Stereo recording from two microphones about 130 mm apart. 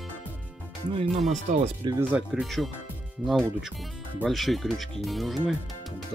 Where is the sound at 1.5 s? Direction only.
65° right (ahead or behind).